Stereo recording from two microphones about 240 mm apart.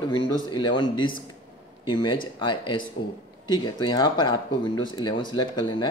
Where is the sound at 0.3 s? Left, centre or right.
Centre.